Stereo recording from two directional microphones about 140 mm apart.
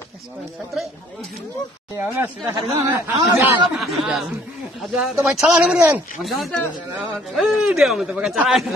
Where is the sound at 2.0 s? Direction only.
20° right (ahead or behind).